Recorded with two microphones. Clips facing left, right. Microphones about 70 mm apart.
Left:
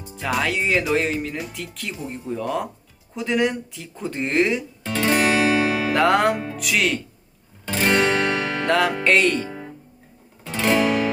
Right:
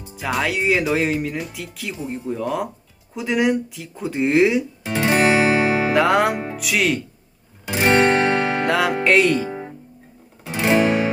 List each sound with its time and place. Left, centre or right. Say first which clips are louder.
0.1 s speech: right 1 dB; centre
4.9 s music: right 2 dB; centre
5.9 s speech: left 1 dB; centre
7.6 s music: right 3 dB; centre
8.6 s speech: left 2 dB; centre
9.5 s music: right 4 dB; centre